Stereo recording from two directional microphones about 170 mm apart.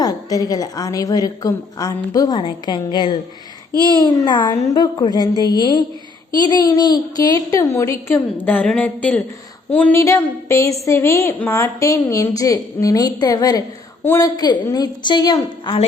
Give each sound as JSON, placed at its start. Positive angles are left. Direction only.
{"t": 0.0, "sound": "a woman's voice", "side_deg": 20}
{"t": 14.3, "sound": "a woman's voice", "side_deg": 25}